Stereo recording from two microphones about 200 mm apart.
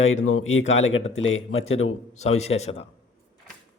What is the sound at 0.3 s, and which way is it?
Speech, 90° left.